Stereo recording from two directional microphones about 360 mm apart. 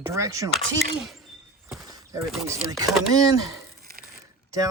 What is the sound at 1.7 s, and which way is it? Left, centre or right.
Speech, centre.